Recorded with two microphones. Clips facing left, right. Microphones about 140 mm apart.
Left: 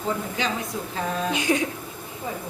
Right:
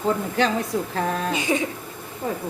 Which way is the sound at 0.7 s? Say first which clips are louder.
Right 6 dB; 65° right (ahead or behind).